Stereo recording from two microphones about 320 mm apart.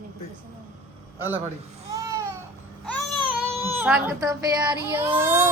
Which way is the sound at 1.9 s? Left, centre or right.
Centre.